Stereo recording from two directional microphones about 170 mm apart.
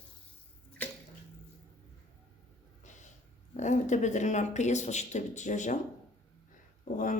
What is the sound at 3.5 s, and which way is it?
Speech, 45° left (ahead or behind).